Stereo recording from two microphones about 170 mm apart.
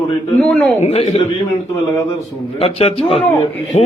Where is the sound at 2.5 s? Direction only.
35° left (ahead or behind).